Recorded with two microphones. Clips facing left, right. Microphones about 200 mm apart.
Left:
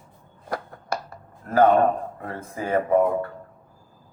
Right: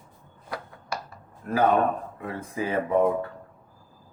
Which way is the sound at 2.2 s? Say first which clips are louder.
Right 1 dB; 50° left (ahead or behind).